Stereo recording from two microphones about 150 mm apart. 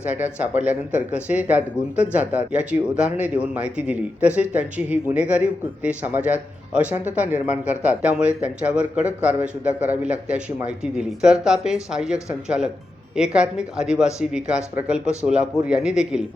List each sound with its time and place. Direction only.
0.0 s a man's voice: 10° right (ahead or behind)